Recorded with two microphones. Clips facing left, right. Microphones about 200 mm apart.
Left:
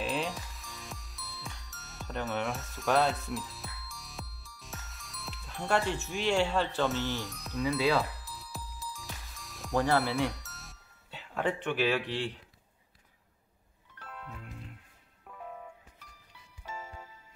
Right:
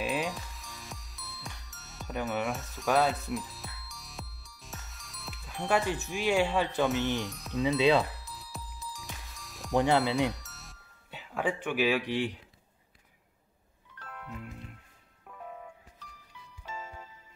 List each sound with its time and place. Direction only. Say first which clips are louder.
0.0 s music: right 1 dB; 5° right (ahead or behind)
6.0 s speech: right 1 dB; centre (ahead or behind)
6.3 s speech: right 2 dB; 15° right (ahead or behind)
7.2 s speech: right 3 dB; centre (ahead or behind)
7.6 s speech: right 3 dB; 20° right (ahead or behind)
8.0 s music: right 1 dB; centre (ahead or behind)
9.8 s speech: right 2 dB; 20° right (ahead or behind)
10.4 s music: left 1 dB; centre (ahead or behind)
11.1 s speech: even; 10° right (ahead or behind)
14.1 s music: right 3 dB; 10° right (ahead or behind)
16.8 s music: right 1 dB; 10° left (ahead or behind)